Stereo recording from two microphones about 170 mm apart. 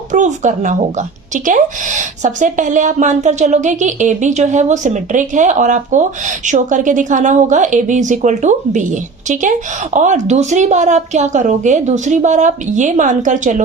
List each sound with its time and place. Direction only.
0.1 s speech: 45° right (ahead or behind)